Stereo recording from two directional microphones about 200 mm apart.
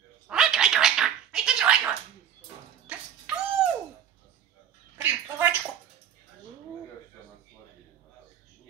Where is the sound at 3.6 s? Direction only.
Centre (ahead or behind).